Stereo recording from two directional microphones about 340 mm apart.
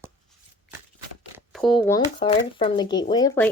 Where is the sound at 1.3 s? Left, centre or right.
Centre.